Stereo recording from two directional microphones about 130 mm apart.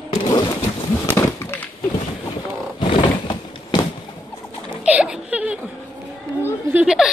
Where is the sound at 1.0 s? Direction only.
15° left (ahead or behind).